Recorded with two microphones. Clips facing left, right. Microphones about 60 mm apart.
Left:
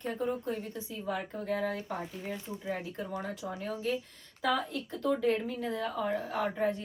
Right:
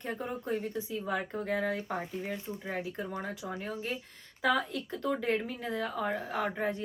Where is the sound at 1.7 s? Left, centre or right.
Right.